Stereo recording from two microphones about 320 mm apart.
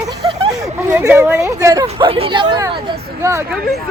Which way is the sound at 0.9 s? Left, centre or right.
Centre.